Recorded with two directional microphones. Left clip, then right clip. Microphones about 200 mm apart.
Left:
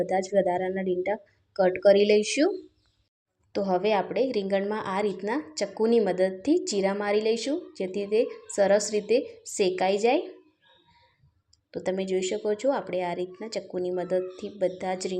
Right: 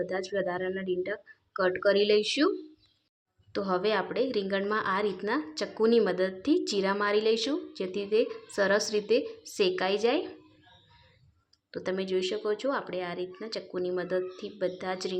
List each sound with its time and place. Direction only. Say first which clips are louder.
0.0 s speech: left 7 dB; 10° left (ahead or behind)
3.5 s speech: left 3 dB; 10° left (ahead or behind)
11.7 s speech: left 3 dB; 10° left (ahead or behind)